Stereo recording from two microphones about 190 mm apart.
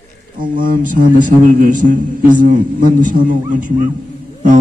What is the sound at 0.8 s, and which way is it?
A man's voice, 45° right (ahead or behind).